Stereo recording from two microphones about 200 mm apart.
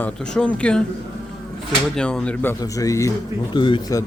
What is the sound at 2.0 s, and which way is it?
Speech, 5° left (ahead or behind).